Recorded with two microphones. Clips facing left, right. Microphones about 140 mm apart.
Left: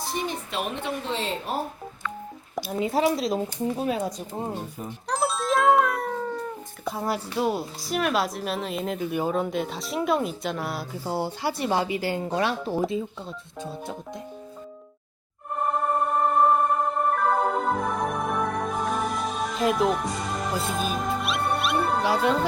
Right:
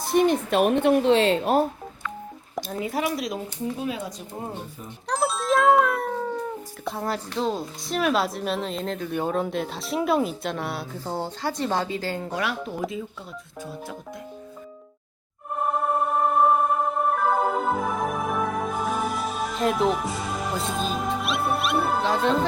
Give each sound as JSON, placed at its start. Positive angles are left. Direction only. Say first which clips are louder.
{"t": 0.1, "sound": "speech", "louder": "right 12 dB", "side_deg": -60}
{"t": 2.7, "sound": "speech", "louder": "left 4 dB", "side_deg": 25}
{"t": 5.0, "sound": "music", "louder": "right 1 dB", "side_deg": 0}
{"t": 6.8, "sound": "a woman's voice", "louder": "left 1 dB", "side_deg": 0}
{"t": 12.4, "sound": "speech", "louder": "left 5 dB", "side_deg": 30}
{"t": 15.5, "sound": "music", "louder": "right 1 dB", "side_deg": -5}
{"t": 22.0, "sound": "speech", "louder": "even", "side_deg": 5}